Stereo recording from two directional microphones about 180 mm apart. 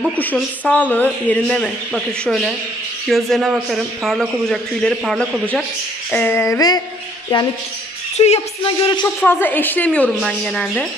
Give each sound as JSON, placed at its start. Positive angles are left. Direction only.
{"t": 0.2, "sound": "a woman's voice", "side_deg": 10}
{"t": 6.1, "sound": "a woman's voice", "side_deg": 10}
{"t": 8.2, "sound": "speech", "side_deg": 35}
{"t": 9.0, "sound": "a woman's voice", "side_deg": 10}